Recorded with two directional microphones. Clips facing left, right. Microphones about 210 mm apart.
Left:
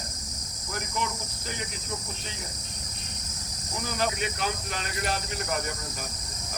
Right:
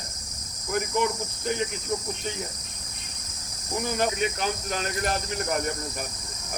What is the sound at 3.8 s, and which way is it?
Speech, 50° right (ahead or behind).